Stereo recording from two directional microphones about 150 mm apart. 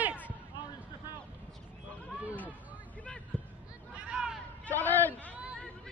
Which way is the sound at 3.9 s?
5° right (ahead or behind).